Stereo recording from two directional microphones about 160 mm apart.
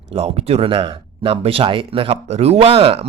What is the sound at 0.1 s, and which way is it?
Speech, 40° right (ahead or behind).